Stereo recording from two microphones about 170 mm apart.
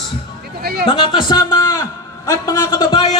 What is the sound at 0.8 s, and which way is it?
A man's voice, 30° left (ahead or behind).